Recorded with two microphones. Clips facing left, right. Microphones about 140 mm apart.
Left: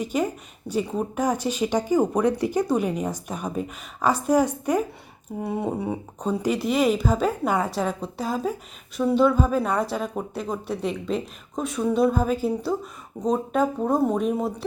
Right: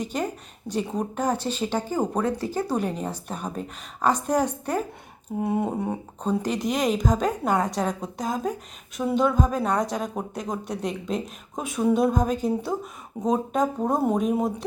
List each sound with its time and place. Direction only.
0.0 s speech: 10° left (ahead or behind)
5.4 s speech: centre (ahead or behind)